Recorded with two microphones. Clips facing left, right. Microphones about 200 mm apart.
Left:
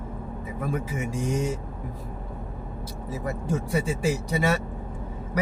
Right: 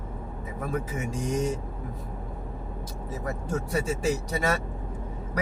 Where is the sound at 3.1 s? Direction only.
10° left (ahead or behind).